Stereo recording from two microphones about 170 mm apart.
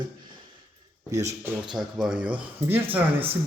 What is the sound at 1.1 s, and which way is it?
Speech, 20° right (ahead or behind).